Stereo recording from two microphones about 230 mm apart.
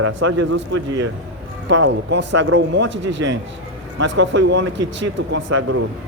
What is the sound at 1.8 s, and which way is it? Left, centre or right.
Speech, right.